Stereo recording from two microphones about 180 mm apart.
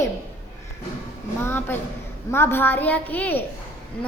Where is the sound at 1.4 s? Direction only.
10° left (ahead or behind).